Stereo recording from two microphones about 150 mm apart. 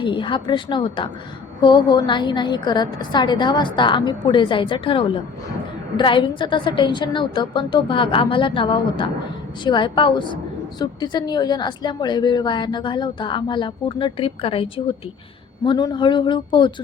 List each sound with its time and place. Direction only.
0.0 s a woman's voice: 35° left (ahead or behind)